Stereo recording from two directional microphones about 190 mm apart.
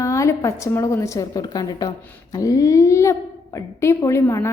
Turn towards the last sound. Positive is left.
turn(degrees=15)  # may be behind; listen again after turning